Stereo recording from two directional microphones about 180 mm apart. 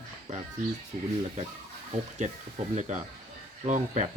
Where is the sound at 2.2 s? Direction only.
40° right (ahead or behind).